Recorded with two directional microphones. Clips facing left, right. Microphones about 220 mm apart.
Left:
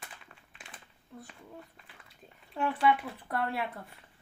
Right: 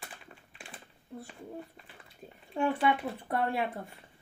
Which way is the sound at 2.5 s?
30° right (ahead or behind).